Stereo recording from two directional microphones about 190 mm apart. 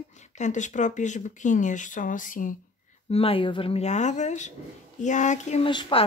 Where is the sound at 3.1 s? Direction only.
30° left (ahead or behind).